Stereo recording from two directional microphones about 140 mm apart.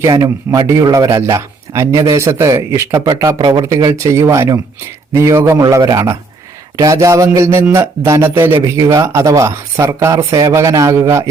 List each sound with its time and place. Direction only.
0.0 s speech: 25° right (ahead or behind)